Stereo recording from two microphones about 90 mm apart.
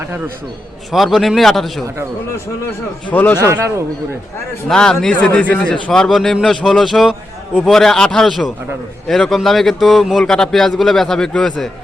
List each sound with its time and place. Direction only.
0.9 s a man's voice: centre (ahead or behind)
3.1 s speech: 20° left (ahead or behind)
3.4 s a man's voice: 30° right (ahead or behind)
4.7 s a man's voice: 10° left (ahead or behind)